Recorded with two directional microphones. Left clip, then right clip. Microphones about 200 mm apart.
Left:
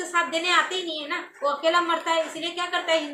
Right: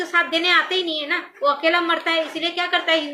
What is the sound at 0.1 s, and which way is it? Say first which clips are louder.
A woman's voice: right 4 dB; 20° left (ahead or behind).